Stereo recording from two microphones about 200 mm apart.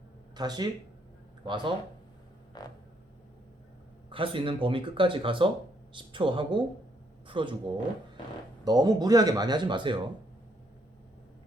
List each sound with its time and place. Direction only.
0.3 s speech: 20° right (ahead or behind)
2.6 s a sound: 20° left (ahead or behind)
4.1 s speech: 25° right (ahead or behind)
8.6 s speech: 20° right (ahead or behind)